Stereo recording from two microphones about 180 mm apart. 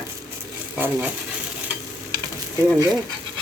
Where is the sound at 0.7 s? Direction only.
10° right (ahead or behind).